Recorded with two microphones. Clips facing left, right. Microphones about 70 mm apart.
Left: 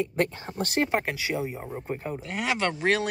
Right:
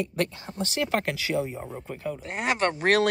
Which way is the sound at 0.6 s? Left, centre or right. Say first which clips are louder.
Left 2 dB; left.